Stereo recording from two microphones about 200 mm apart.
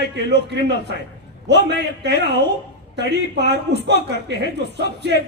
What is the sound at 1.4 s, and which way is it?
Speech, 60° right (ahead or behind).